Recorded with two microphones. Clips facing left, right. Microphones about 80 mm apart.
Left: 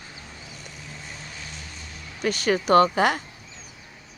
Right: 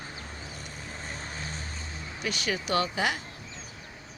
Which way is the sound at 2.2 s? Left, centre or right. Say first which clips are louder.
Left 8 dB; left.